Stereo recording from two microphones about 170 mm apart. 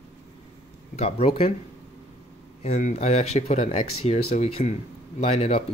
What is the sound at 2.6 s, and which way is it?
Speech, 40° left (ahead or behind).